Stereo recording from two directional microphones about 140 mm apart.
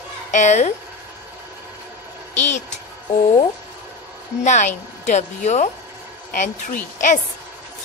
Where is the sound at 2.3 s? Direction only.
60° left (ahead or behind).